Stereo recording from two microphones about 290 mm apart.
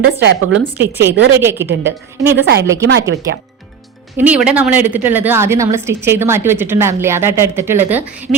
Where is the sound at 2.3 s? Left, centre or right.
Right.